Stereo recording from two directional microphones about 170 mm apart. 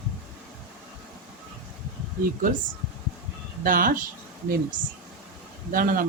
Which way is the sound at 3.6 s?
55° right (ahead or behind).